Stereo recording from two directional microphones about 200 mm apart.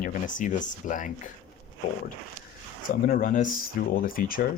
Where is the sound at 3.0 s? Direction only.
45° left (ahead or behind).